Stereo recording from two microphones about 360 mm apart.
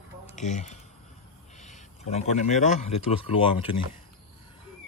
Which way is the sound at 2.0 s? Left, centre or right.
Centre.